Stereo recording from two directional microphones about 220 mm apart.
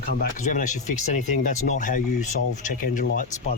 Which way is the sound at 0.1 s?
40° left (ahead or behind).